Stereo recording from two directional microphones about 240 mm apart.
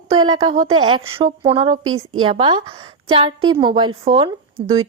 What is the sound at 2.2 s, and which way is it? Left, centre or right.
A woman's voice, right.